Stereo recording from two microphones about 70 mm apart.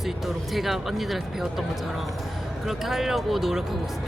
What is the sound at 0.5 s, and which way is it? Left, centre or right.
Speech, centre.